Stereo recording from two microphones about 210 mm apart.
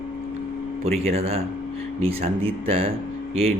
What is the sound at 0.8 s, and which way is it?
A man's voice, 30° right (ahead or behind).